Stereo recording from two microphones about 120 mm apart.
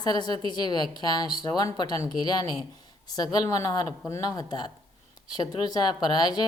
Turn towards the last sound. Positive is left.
turn(degrees=35)  # may be behind; listen again after turning